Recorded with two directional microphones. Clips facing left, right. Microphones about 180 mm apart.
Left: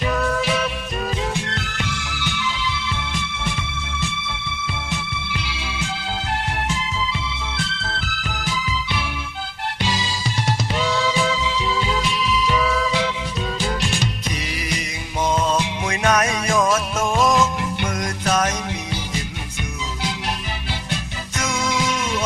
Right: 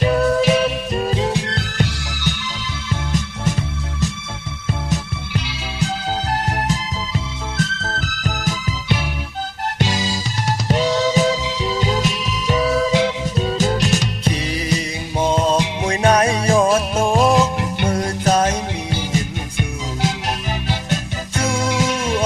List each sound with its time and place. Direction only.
0.0 s music: 35° right (ahead or behind)
6.7 s music: 40° right (ahead or behind)
21.3 s music: 30° right (ahead or behind)